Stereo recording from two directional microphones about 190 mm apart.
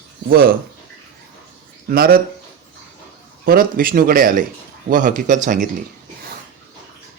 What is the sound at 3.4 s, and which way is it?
Speech, 50° right (ahead or behind).